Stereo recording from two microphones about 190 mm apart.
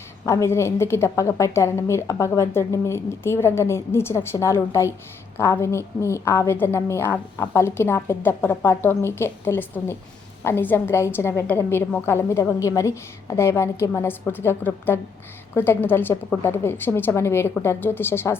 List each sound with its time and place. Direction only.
0.3 s a woman's voice: 15° left (ahead or behind)